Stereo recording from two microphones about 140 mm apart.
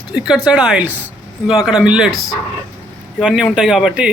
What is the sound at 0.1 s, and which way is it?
Speech, 5° right (ahead or behind).